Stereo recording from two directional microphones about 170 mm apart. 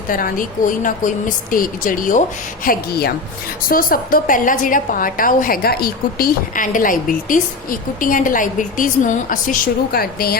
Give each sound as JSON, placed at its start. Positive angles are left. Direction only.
{"t": 0.1, "sound": "a woman's voice", "side_deg": 55}
{"t": 2.6, "sound": "a woman's voice", "side_deg": 65}